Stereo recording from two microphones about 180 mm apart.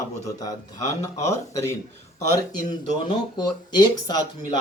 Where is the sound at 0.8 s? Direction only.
40° left (ahead or behind).